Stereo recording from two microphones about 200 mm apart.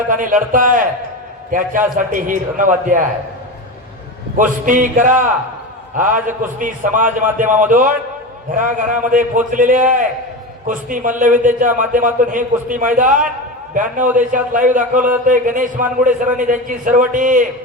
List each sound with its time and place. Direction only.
0.1 s a man's voice: 40° right (ahead or behind)
4.4 s a man's voice: 40° right (ahead or behind)